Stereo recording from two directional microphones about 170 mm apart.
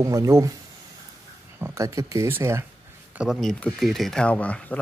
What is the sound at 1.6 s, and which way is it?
Speech, 20° right (ahead or behind).